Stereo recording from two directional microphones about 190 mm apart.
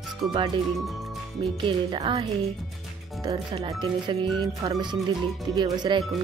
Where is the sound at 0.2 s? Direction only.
25° right (ahead or behind).